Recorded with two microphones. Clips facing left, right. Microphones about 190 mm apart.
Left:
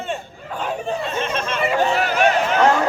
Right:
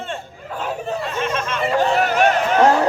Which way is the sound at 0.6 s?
5° right (ahead or behind).